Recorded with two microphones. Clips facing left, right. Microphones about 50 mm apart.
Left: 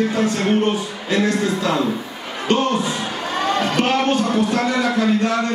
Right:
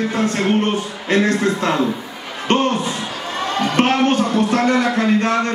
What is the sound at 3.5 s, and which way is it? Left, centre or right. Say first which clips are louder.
Speech: right 1 dB; centre.